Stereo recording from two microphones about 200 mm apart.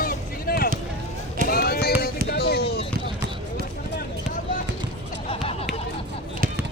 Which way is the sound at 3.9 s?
40° left (ahead or behind).